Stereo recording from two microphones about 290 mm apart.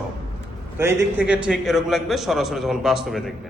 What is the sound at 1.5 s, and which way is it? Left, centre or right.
A man's voice, centre.